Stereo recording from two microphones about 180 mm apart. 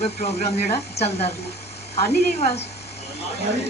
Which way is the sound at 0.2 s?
35° left (ahead or behind).